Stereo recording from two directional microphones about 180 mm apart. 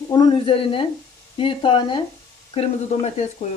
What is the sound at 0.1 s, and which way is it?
Speech, 25° left (ahead or behind).